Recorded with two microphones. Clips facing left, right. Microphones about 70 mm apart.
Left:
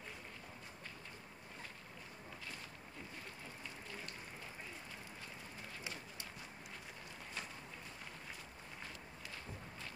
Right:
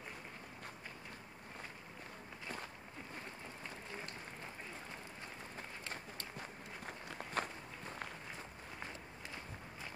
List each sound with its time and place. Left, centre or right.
6.9 s run: right